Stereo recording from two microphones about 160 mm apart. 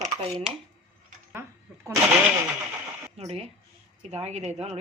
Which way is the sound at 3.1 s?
40° right (ahead or behind).